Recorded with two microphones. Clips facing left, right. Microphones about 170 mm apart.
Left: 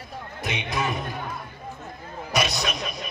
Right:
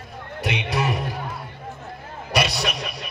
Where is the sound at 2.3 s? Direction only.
65° right (ahead or behind).